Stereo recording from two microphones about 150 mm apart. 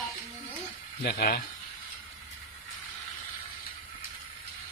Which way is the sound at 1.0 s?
90° left.